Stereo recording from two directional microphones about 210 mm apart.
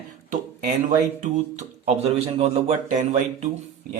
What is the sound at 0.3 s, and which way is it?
Speech, 35° right (ahead or behind).